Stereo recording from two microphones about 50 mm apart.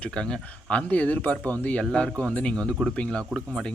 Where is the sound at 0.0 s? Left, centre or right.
Centre; by 1.5 s left.